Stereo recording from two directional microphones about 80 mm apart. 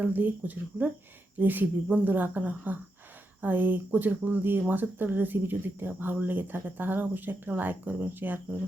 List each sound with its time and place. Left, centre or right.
0.0 s speech: right